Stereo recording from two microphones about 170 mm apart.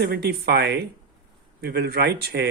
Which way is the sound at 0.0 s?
70° right (ahead or behind).